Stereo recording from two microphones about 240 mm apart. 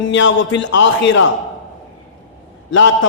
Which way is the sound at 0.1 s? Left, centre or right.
Left.